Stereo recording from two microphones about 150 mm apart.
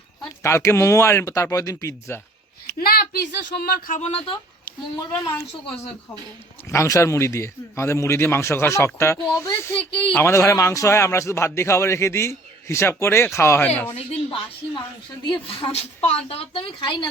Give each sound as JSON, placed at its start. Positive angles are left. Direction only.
{"t": 0.2, "sound": "a man's voice", "side_deg": 20}
{"t": 2.7, "sound": "speech", "side_deg": 90}
{"t": 4.9, "sound": "a man's voice", "side_deg": 20}
{"t": 6.7, "sound": "a man's voice", "side_deg": 20}
{"t": 9.7, "sound": "speech", "side_deg": 35}
{"t": 10.1, "sound": "a man's voice", "side_deg": 15}
{"t": 15.4, "sound": "speech", "side_deg": 35}